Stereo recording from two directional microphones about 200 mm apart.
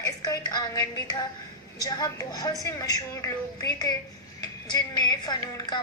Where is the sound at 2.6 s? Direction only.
15° left (ahead or behind).